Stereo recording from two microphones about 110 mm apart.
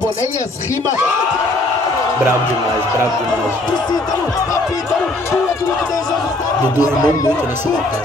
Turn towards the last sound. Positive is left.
turn(degrees=35)  # may be behind; listen again after turning